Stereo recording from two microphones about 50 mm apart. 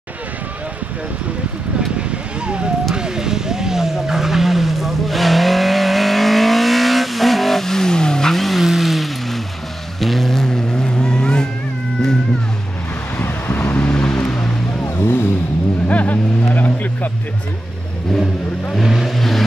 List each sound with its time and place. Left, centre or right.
2.0 s a sound: right
2.9 s vehicle: centre
13.2 s vehicle: left
15.0 s vehicle: left
15.9 s vehicle: left
18.8 s vehicle: centre